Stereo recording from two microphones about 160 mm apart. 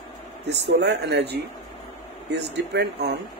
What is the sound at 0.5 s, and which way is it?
Speech, 90° right.